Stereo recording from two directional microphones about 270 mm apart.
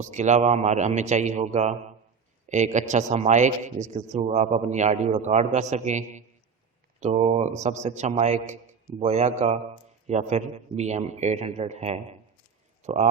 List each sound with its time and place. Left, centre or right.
0.0 s a man's voice: right